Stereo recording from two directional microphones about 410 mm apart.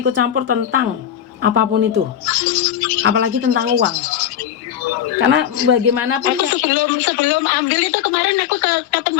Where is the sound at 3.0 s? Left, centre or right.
Right.